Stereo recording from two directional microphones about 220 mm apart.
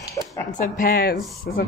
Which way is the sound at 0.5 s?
40° left (ahead or behind).